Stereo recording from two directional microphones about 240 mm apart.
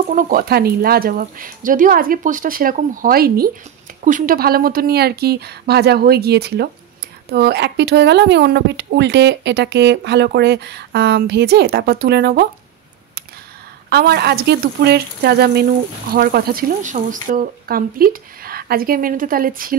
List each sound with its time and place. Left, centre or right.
0.1 s speech: right
13.8 s speech: right